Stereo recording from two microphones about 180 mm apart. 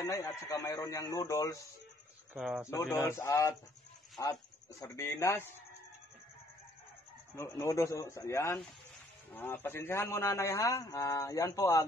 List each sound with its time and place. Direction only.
0.0 s a man's voice: 15° left (ahead or behind)
2.3 s speech: 5° right (ahead or behind)
2.7 s a man's voice: 15° left (ahead or behind)
7.3 s a man's voice: 15° left (ahead or behind)